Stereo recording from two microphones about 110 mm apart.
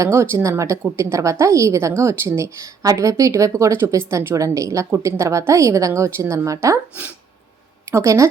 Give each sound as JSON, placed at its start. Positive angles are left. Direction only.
{"t": 0.0, "sound": "a woman's voice", "side_deg": -25}
{"t": 7.9, "sound": "speech", "side_deg": -25}